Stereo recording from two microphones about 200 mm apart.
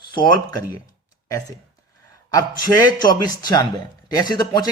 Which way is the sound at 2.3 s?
20° left (ahead or behind).